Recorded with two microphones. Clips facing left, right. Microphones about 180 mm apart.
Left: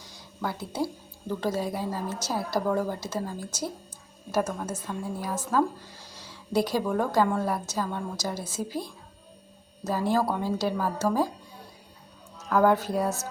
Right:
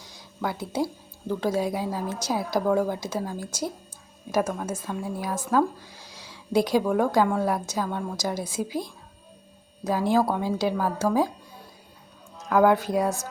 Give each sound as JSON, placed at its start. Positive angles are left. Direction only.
{"t": 1.4, "sound": "a woman's voice", "side_deg": -10}
{"t": 10.1, "sound": "a woman's voice", "side_deg": -10}
{"t": 12.5, "sound": "a woman's voice", "side_deg": -10}